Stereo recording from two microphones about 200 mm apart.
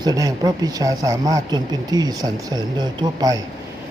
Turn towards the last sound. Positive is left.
turn(degrees=-20)  # may be behind; listen again after turning